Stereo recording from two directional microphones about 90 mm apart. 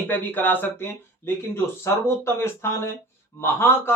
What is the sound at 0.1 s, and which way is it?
A man's voice, 20° left (ahead or behind).